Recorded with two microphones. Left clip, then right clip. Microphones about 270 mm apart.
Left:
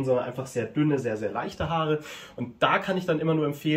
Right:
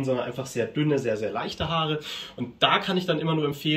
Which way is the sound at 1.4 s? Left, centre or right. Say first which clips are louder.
Right 1 dB; centre.